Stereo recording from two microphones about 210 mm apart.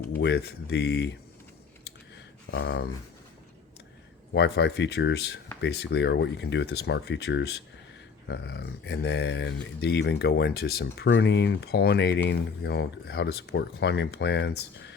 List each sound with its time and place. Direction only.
0.1 s speech: 55° left (ahead or behind)
2.1 s a sound: 50° left (ahead or behind)
4.4 s speech: 55° left (ahead or behind)